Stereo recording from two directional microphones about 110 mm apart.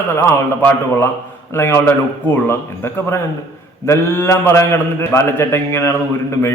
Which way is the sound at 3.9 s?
25° left (ahead or behind).